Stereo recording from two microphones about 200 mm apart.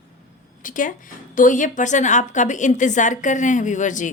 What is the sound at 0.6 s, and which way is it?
A woman's voice, 40° left (ahead or behind).